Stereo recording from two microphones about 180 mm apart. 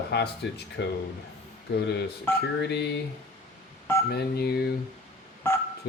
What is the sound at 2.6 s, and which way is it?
Speech, 70° left (ahead or behind).